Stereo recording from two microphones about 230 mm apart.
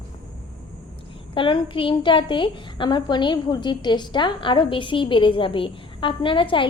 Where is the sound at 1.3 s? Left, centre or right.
Left.